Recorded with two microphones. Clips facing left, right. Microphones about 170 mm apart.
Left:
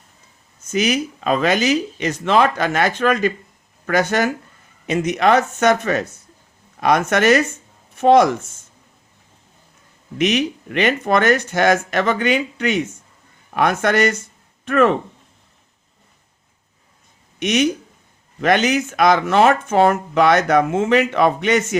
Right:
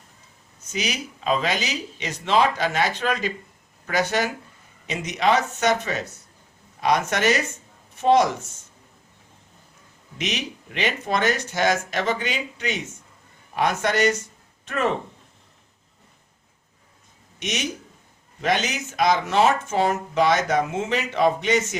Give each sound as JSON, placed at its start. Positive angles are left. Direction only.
{"t": 0.6, "sound": "speech", "side_deg": 50}
{"t": 10.2, "sound": "speech", "side_deg": 55}
{"t": 17.4, "sound": "speech", "side_deg": 60}